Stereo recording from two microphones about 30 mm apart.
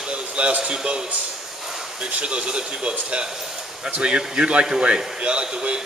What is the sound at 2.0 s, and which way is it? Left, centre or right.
A man's voice, right.